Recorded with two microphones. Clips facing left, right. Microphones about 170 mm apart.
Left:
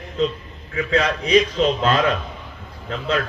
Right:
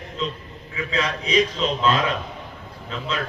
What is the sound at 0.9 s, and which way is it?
A man's voice, 40° left (ahead or behind).